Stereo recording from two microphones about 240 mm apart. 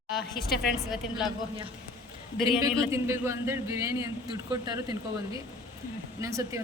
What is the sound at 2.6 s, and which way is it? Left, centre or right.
Speech, centre.